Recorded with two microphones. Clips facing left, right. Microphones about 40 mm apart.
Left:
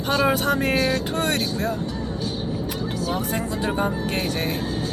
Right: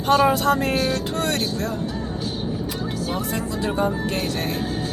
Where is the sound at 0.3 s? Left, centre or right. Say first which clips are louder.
Right 1 dB; left.